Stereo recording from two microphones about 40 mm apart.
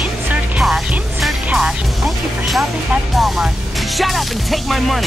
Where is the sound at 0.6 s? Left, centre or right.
Centre.